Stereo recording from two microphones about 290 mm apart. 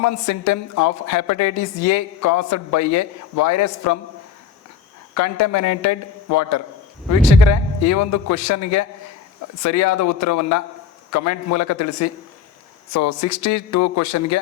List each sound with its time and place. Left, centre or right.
0.0 s a woman's voice: left
5.1 s a woman's voice: left